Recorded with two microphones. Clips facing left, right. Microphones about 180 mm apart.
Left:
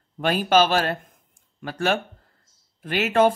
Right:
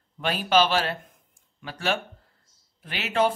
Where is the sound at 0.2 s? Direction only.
45° left (ahead or behind).